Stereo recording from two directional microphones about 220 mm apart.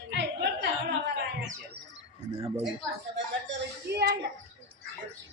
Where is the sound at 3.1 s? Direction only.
50° right (ahead or behind).